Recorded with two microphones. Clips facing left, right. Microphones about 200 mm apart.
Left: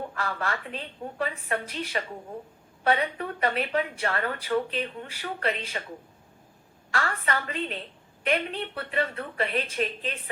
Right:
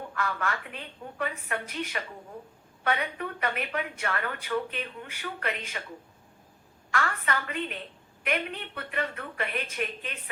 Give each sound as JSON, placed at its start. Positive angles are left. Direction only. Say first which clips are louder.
{"t": 0.1, "sound": "speech", "louder": "even", "side_deg": 35}
{"t": 6.9, "sound": "speech", "louder": "left 1 dB", "side_deg": 35}